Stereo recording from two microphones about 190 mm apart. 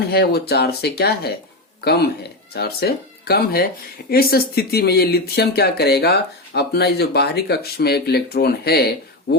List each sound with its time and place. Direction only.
0.1 s speech: 60° left (ahead or behind)